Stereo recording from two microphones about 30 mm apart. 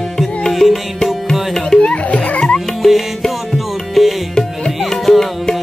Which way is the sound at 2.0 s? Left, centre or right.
Left.